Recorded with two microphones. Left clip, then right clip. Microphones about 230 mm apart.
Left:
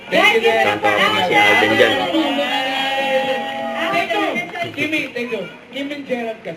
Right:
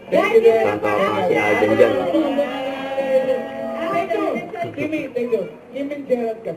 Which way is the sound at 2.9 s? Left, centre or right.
Centre.